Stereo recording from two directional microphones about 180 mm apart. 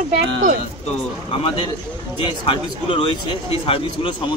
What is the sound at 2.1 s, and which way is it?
A man's voice, 30° left (ahead or behind).